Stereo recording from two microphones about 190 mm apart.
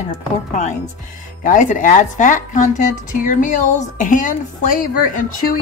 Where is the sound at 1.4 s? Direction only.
45° left (ahead or behind).